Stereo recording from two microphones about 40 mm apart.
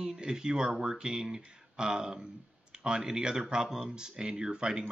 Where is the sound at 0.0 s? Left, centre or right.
Centre.